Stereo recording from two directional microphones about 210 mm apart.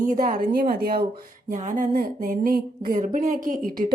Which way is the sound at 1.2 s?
35° right (ahead or behind).